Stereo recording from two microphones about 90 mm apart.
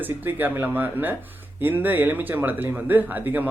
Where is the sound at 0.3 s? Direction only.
20° right (ahead or behind).